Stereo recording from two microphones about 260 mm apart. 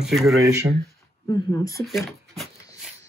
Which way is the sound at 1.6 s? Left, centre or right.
Centre.